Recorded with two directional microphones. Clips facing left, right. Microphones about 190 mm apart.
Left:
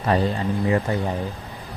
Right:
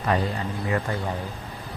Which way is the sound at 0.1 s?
35° left (ahead or behind).